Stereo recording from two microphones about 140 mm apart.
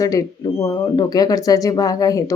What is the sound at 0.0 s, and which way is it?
Speech, 25° left (ahead or behind).